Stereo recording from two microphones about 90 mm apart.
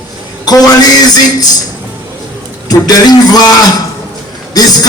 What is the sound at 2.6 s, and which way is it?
Speech, 45° left (ahead or behind).